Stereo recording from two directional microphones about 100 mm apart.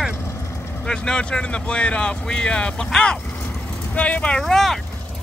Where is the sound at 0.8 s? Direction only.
10° left (ahead or behind).